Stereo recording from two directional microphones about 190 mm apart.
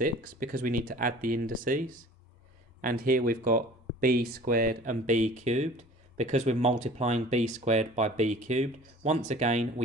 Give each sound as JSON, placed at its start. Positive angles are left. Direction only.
{"t": 0.0, "sound": "speech", "side_deg": -45}